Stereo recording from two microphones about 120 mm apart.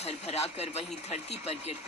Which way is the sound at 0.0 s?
65° left (ahead or behind).